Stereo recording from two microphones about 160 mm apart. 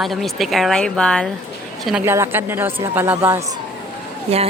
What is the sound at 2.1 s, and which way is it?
A woman's voice, 15° right (ahead or behind).